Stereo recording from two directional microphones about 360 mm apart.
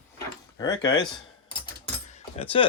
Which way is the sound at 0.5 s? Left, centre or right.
Centre.